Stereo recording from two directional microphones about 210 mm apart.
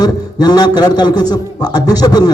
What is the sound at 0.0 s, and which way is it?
A man's voice, 20° left (ahead or behind).